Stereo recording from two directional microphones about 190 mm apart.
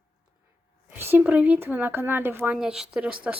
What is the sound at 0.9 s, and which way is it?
Speech, 10° right (ahead or behind).